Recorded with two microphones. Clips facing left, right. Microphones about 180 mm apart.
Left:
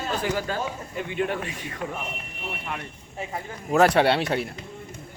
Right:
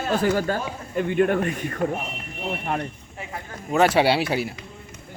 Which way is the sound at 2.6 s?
40° right (ahead or behind).